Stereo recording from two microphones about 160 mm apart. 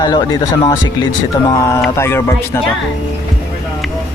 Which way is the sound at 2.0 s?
15° left (ahead or behind).